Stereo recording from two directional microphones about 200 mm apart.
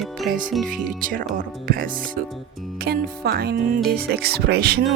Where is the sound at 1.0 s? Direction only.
45° right (ahead or behind).